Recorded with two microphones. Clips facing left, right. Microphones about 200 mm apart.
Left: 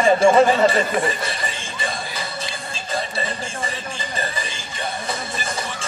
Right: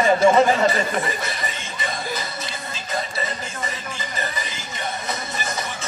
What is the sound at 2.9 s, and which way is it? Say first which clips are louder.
Music: left 1 dB; 30° left (ahead or behind).